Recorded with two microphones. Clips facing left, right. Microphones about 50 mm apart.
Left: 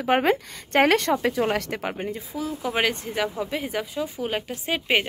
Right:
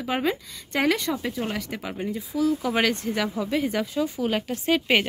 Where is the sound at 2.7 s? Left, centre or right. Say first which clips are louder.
Right 1 dB; centre.